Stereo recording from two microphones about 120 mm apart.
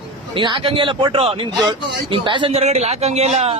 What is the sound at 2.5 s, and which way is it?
A man's voice, 65° right (ahead or behind).